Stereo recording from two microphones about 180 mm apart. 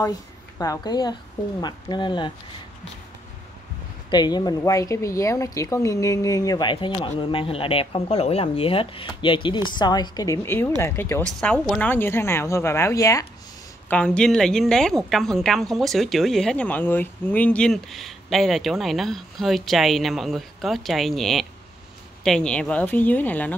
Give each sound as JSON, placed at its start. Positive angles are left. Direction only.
{"t": 0.6, "sound": "a woman's voice", "side_deg": 20}
{"t": 4.1, "sound": "a woman's voice", "side_deg": 25}
{"t": 13.8, "sound": "a woman's voice", "side_deg": 5}